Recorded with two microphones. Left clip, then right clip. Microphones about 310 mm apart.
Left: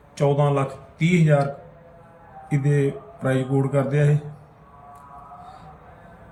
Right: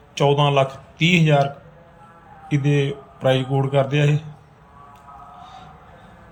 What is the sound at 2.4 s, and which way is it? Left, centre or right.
A man's voice, right.